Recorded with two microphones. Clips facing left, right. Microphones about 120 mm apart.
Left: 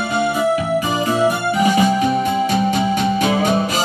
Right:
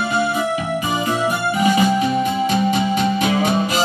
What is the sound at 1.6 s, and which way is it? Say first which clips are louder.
Music: even; 40° left (ahead or behind).